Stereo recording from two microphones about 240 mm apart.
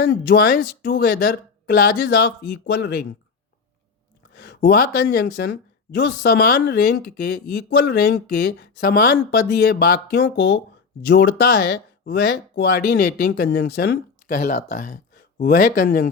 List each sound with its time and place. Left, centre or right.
0.0 s a woman's voice: left
4.4 s a woman's voice: left